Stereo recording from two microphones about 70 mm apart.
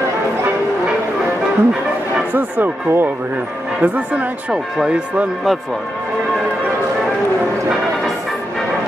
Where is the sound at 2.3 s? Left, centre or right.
Right; by 5.2 s centre.